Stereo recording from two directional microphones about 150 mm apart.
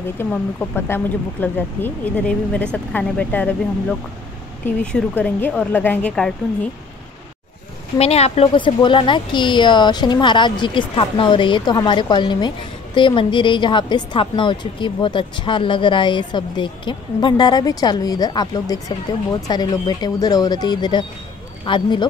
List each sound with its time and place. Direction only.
0.2 s speech: 15° left (ahead or behind)
4.6 s speech: 10° left (ahead or behind)
8.0 s speech: 40° left (ahead or behind)